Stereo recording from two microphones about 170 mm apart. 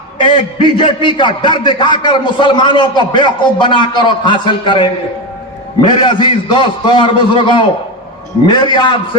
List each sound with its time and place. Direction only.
0.2 s a man's voice: 30° left (ahead or behind)